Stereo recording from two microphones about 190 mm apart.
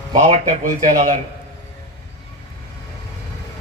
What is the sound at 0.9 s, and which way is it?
Speech, 40° right (ahead or behind).